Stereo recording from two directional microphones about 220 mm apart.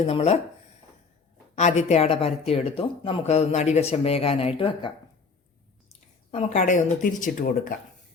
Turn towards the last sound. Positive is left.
turn(degrees=35)  # may be behind; listen again after turning